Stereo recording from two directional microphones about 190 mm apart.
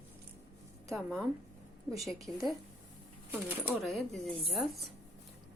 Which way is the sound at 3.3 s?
10° right (ahead or behind).